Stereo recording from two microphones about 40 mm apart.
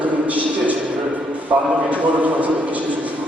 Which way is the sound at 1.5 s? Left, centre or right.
Right.